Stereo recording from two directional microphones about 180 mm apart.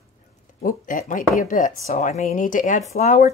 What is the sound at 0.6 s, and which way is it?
A woman's voice, 45° left (ahead or behind).